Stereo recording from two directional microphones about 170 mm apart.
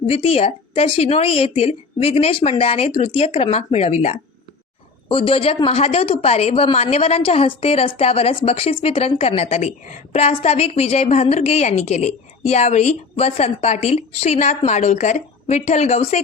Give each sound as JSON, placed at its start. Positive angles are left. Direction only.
{"t": 0.1, "sound": "speech", "side_deg": 35}